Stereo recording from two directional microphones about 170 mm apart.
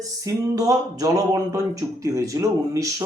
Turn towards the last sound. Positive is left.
turn(degrees=-20)  # may be behind; listen again after turning